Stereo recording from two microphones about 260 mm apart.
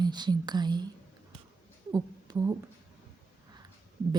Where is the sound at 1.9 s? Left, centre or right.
Centre.